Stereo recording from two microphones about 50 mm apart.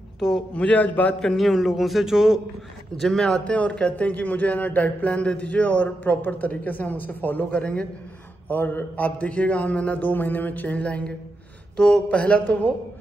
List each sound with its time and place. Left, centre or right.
0.6 s a man's voice: left
1.3 s a man's voice: centre
3.0 s a man's voice: centre
3.3 s a man's voice: left